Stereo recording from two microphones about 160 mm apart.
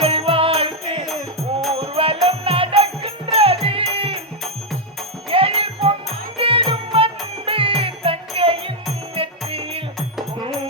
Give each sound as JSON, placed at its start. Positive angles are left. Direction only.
{"t": 0.0, "sound": "music", "side_deg": -40}
{"t": 5.3, "sound": "music", "side_deg": -35}